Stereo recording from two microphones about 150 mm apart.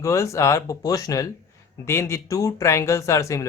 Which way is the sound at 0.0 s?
20° left (ahead or behind).